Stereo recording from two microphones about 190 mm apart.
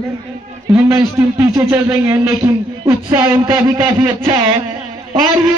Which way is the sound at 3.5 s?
25° right (ahead or behind).